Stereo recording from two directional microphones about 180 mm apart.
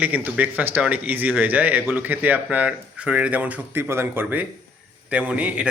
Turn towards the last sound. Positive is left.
turn(degrees=-5)  # may be behind; listen again after turning